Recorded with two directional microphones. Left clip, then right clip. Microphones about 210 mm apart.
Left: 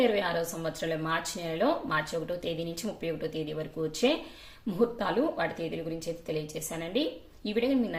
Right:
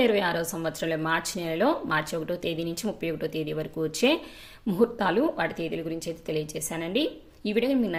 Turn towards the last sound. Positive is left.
turn(degrees=-30)  # may be behind; listen again after turning